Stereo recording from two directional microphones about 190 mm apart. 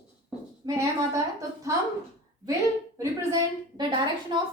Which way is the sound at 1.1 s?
15° right (ahead or behind).